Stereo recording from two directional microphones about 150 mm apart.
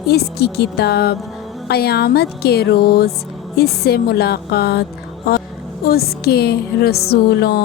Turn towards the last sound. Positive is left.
turn(degrees=90)